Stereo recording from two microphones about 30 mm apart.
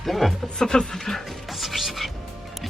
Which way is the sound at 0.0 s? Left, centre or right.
Centre.